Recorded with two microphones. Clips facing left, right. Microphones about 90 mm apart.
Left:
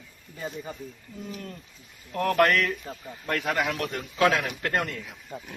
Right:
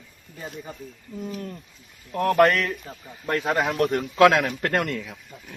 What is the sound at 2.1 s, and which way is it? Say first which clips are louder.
Speech: right 3 dB; 15° right (ahead or behind).